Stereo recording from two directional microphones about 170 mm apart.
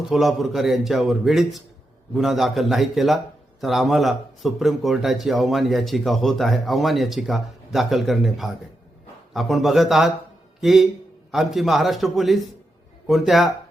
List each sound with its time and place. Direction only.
0.1 s speech: centre (ahead or behind)